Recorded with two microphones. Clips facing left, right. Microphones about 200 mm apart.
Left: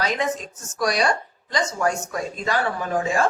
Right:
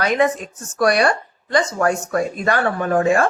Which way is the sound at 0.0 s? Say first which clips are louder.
Right 6 dB; 60° right (ahead or behind).